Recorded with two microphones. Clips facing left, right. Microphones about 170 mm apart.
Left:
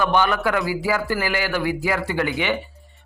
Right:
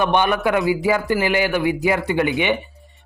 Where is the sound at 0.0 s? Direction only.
20° right (ahead or behind).